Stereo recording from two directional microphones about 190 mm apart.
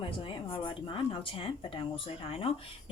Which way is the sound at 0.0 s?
25° left (ahead or behind).